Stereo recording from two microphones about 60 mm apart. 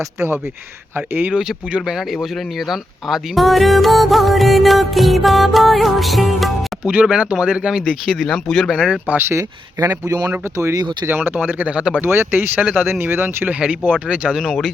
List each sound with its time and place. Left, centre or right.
0.9 s speech: right
1.3 s speech: centre
6.8 s speech: right
7.9 s speech: centre
9.3 s speech: right
10.6 s speech: right
11.1 s speech: right; by 11.9 s centre
12.0 s speech: right
12.6 s speech: centre
12.9 s speech: right
13.5 s speech: centre
14.4 s speech: centre